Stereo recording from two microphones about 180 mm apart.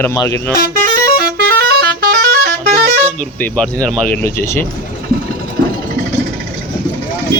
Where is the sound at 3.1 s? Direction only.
5° left (ahead or behind).